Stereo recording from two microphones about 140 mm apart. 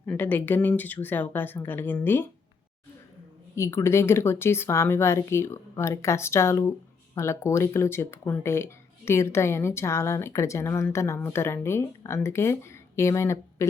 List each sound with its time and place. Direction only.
0.1 s speech: 15° left (ahead or behind)
3.5 s speech: 20° left (ahead or behind)